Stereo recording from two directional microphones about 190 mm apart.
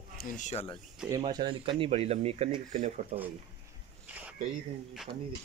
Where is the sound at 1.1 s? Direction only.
20° right (ahead or behind); by 3.0 s 35° right (ahead or behind).